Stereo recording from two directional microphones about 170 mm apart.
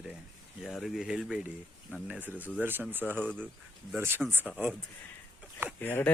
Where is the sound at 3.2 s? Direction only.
5° left (ahead or behind).